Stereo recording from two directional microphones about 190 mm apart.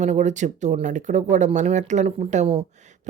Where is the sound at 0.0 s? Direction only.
40° right (ahead or behind).